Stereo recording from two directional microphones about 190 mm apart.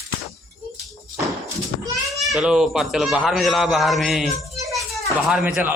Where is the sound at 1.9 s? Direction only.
Centre (ahead or behind).